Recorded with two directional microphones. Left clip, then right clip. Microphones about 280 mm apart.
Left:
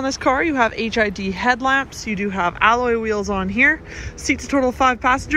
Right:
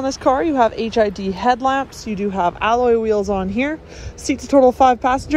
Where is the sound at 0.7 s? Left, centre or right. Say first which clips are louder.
Right 2 dB; right.